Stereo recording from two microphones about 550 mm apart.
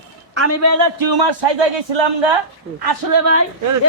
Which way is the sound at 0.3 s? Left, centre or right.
Right.